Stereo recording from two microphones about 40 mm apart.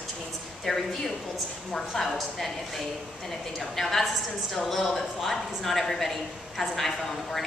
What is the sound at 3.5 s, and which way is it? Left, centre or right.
A woman's voice, centre.